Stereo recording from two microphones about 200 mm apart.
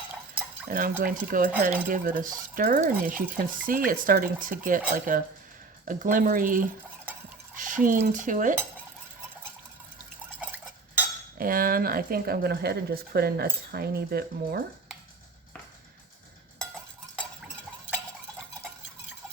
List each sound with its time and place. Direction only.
0.7 s stir: 45° right (ahead or behind)
7.5 s a sound: 40° right (ahead or behind)
7.9 s speech: 40° right (ahead or behind)
11.3 s stir: 45° right (ahead or behind)